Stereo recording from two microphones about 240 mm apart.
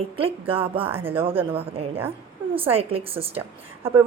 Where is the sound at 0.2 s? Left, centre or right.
Right.